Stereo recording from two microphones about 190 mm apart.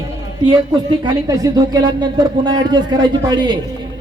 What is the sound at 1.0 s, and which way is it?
Speech, 20° right (ahead or behind).